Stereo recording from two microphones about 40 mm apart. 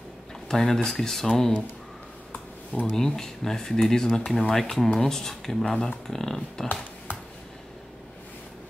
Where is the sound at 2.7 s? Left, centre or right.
Left.